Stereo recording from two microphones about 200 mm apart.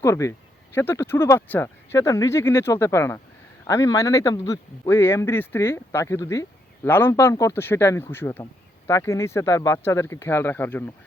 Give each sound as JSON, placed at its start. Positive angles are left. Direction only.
{"t": 0.0, "sound": "speech", "side_deg": 15}